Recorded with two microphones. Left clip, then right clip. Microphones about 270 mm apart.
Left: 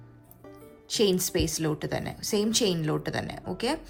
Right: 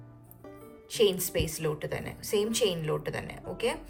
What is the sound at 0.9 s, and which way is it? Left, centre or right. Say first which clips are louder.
Speech: left 1 dB; centre.